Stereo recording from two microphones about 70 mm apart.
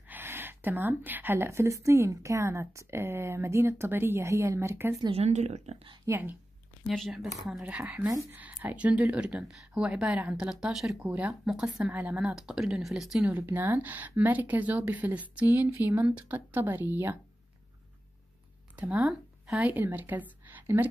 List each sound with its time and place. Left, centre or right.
0.1 s speech: right
6.1 s speech: right
6.9 s speech: centre
7.6 s speech: centre
9.2 s speech: centre
9.8 s speech: centre
10.5 s speech: centre
11.0 s speech: centre
11.9 s speech: right
12.2 s speech: centre
13.4 s speech: right
18.8 s speech: right
19.0 s speech: centre
19.6 s a woman's voice: right